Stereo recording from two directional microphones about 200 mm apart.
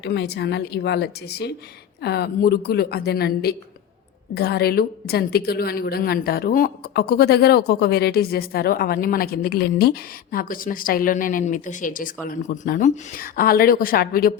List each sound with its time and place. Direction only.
0.0 s a woman's voice: 55° left (ahead or behind)